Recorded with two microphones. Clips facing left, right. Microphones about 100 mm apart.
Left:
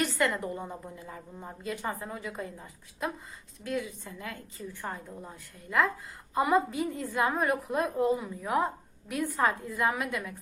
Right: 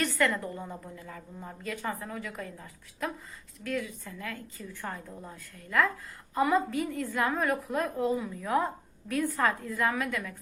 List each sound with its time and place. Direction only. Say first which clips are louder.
0.0 s a woman's voice: even; 20° left (ahead or behind)